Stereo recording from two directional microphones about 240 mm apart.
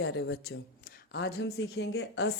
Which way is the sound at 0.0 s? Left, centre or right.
Left.